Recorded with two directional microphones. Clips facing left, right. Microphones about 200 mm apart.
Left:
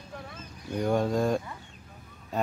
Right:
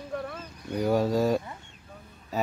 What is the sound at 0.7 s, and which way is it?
Speech, 5° right (ahead or behind).